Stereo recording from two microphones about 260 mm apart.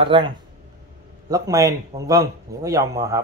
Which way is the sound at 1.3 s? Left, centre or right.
Centre.